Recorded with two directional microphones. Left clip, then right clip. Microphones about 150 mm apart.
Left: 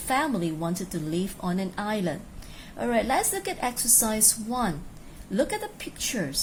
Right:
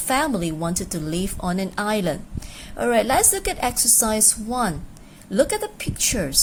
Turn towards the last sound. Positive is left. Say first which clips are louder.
# right 6 dB
turn(degrees=-35)  # may be behind; listen again after turning